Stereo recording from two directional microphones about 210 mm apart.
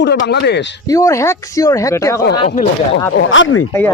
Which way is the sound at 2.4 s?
30° left (ahead or behind).